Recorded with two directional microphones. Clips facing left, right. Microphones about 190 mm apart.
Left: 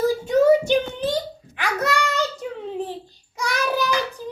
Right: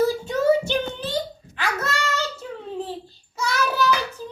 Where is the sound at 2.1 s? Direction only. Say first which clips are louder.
Left 3 dB; 15° left (ahead or behind).